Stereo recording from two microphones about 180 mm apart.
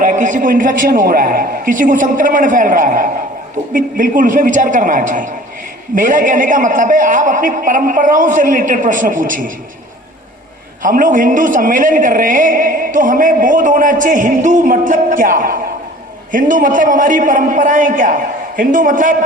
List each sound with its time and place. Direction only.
0.0 s a man's voice: 45° right (ahead or behind)
10.8 s a man's voice: 50° right (ahead or behind)